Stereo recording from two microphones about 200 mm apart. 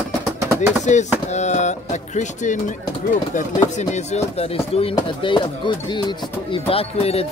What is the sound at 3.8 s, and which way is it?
Speech, 35° left (ahead or behind).